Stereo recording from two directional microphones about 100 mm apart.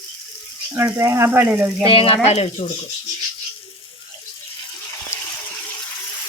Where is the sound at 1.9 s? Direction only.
65° left (ahead or behind); by 2.6 s 90° left.